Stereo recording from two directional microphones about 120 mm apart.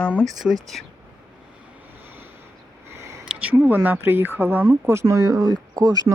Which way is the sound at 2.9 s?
25° right (ahead or behind).